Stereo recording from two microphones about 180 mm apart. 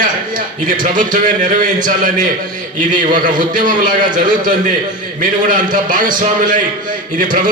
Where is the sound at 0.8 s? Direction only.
50° right (ahead or behind).